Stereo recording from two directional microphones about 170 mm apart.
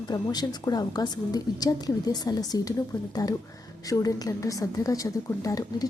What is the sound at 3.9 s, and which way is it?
A woman's voice, 20° left (ahead or behind).